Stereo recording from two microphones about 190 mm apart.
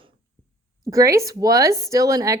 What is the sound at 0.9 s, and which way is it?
Speech, 15° right (ahead or behind).